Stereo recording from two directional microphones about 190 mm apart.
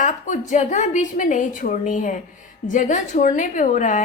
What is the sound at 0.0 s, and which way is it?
A woman's voice, 40° left (ahead or behind).